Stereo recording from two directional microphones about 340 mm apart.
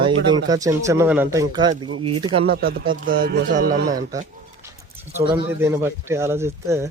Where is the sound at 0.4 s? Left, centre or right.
Centre.